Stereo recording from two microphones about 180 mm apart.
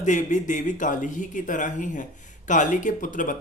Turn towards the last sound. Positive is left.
turn(degrees=45)  # may be behind; listen again after turning